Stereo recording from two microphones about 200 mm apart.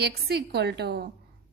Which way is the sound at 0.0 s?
55° right (ahead or behind).